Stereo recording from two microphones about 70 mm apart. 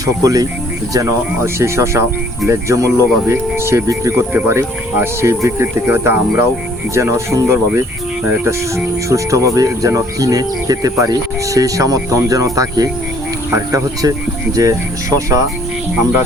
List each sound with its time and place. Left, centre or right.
0.0 s speech: right
1.5 s speech: right
4.1 s speech: right
4.9 s speech: right
5.8 s speech: right
6.9 s speech: right